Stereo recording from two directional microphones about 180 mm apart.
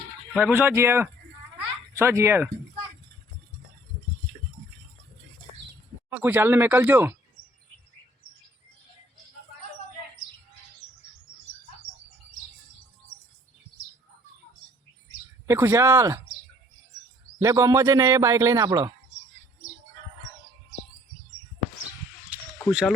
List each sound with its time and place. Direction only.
0.3 s a man's voice: 5° right (ahead or behind)
6.1 s a man's voice: 10° right (ahead or behind)
15.4 s a man's voice: 15° right (ahead or behind)
17.4 s a man's voice: 15° right (ahead or behind)
22.3 s a sound: 10° right (ahead or behind)
22.7 s speech: 5° right (ahead or behind)